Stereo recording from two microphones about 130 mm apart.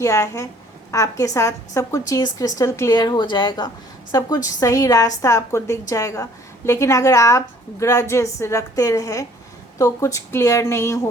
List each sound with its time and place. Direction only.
0.0 s a woman's voice: 25° left (ahead or behind)
2.9 s a woman's voice: 35° left (ahead or behind)